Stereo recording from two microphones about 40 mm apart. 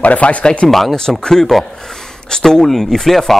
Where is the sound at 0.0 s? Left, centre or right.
Left.